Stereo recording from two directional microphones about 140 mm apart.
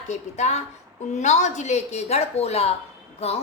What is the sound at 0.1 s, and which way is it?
A woman's voice, 55° left (ahead or behind).